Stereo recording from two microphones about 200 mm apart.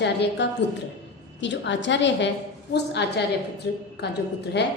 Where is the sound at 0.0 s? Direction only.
60° left (ahead or behind).